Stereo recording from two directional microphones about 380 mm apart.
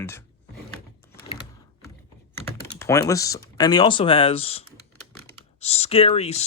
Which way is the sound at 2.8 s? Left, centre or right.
Centre.